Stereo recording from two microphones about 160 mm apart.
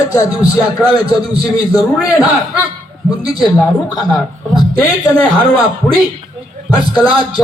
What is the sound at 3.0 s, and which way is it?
Speech, 25° left (ahead or behind).